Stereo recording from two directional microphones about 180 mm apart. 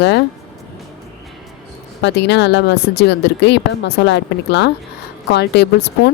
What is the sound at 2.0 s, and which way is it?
Speech, 70° left (ahead or behind).